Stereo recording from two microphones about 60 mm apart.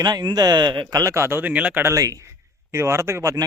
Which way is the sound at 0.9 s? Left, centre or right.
Right.